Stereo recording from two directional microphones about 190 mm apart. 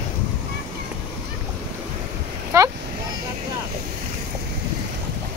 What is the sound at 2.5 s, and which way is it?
Vehicle, 15° right (ahead or behind).